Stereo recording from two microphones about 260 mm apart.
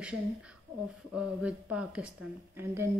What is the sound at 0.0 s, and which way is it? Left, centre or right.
A woman's voice, centre.